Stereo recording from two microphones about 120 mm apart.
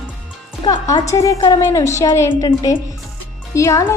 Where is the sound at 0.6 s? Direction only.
40° left (ahead or behind).